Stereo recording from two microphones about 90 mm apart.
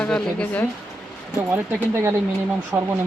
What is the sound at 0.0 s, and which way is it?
Speech, 15° left (ahead or behind).